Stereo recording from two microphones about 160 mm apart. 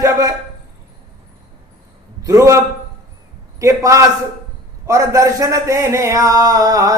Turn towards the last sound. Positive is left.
turn(degrees=-20)  # may be behind; listen again after turning